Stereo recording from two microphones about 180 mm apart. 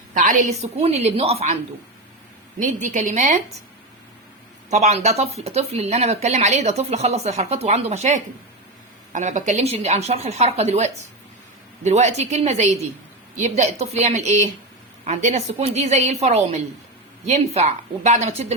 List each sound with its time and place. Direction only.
0.2 s speech: 45° right (ahead or behind)
2.6 s a woman's voice: 45° right (ahead or behind)
4.7 s speech: 40° right (ahead or behind)